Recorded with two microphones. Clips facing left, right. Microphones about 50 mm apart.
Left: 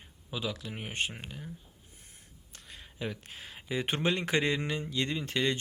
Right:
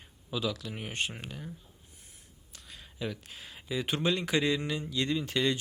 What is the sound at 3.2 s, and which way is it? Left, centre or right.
Speech, left.